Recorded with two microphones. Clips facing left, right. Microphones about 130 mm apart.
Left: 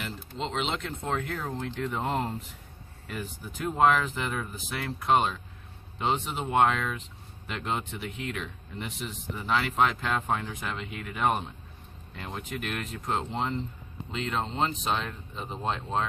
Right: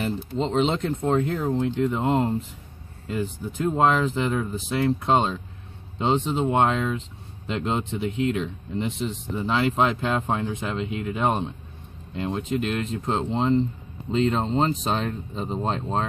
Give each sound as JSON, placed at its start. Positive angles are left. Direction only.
{"t": 0.5, "sound": "speech", "side_deg": -35}
{"t": 1.2, "sound": "speech", "side_deg": -25}
{"t": 15.1, "sound": "speech", "side_deg": -25}